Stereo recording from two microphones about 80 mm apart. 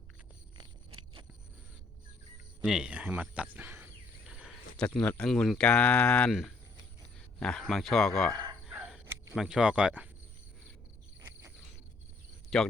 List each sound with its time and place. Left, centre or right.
2.6 s speech: centre
4.3 s cricket: centre
4.8 s mantra: centre
5.3 s speech: centre
5.6 s mantra: centre
7.2 s speech: centre
8.7 s crow: centre
9.3 s speech: centre
12.5 s speech: centre